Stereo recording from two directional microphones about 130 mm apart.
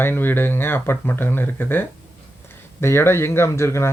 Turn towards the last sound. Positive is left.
turn(degrees=20)  # may be behind; listen again after turning